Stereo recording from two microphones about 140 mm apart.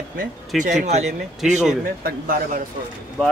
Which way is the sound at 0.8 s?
55° right (ahead or behind).